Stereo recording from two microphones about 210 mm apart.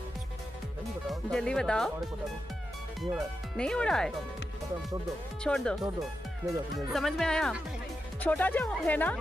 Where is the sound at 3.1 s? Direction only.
5° left (ahead or behind).